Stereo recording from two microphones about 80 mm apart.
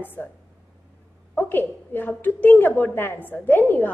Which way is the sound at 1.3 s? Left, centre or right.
Left.